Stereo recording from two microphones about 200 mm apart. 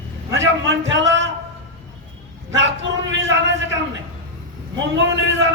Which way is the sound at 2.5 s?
65° right (ahead or behind).